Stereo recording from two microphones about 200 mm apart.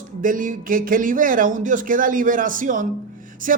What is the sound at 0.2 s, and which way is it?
A man's voice, 40° right (ahead or behind).